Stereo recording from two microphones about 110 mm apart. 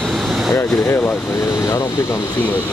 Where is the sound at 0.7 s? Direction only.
15° left (ahead or behind).